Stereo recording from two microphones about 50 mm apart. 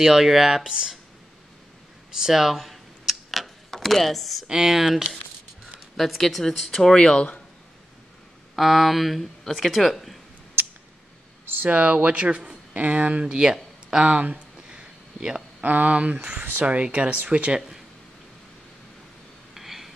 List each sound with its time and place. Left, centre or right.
0.0 s speech: centre
2.1 s camera: centre
4.5 s speech: centre
8.5 s speech: centre
11.4 s a sound: right
11.7 s speech: right
14.0 s a sound: right
15.6 s speech: right
19.5 s a sound: centre